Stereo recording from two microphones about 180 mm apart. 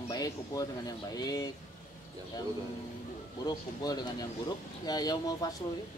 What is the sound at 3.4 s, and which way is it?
Speech, 20° left (ahead or behind).